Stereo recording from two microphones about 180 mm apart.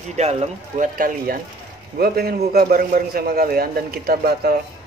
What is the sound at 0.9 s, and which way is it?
A man's voice, 50° right (ahead or behind).